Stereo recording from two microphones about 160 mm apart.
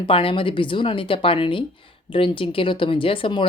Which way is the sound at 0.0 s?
35° left (ahead or behind).